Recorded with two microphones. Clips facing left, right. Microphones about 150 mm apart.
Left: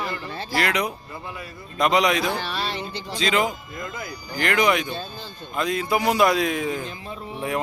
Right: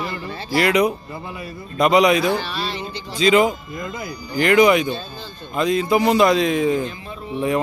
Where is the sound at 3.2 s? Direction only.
10° right (ahead or behind).